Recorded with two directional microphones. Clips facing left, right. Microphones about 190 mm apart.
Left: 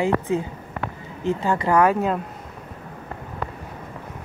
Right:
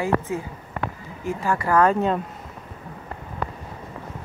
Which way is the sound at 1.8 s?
5° left (ahead or behind).